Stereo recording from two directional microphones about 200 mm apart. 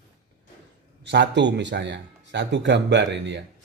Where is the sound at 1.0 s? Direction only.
60° right (ahead or behind).